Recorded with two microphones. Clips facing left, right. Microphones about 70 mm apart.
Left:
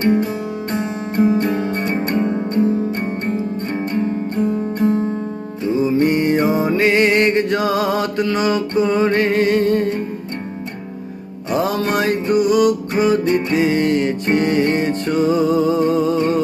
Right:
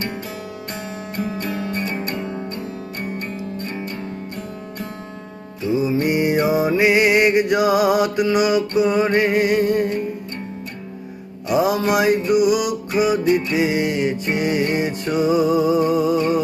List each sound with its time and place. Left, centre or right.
0.0 s music: left
5.7 s music: centre
11.5 s music: centre